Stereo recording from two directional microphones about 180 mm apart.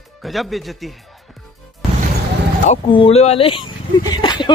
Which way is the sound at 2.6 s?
35° left (ahead or behind).